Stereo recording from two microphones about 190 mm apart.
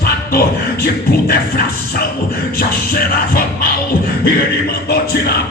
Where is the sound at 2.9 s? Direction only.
50° left (ahead or behind).